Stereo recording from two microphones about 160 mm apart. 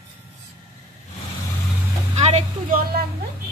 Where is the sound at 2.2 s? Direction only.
40° right (ahead or behind).